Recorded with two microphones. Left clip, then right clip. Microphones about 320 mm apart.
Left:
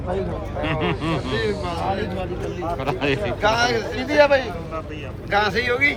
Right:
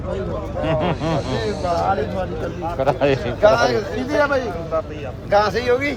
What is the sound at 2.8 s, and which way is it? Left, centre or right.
A man's voice, right.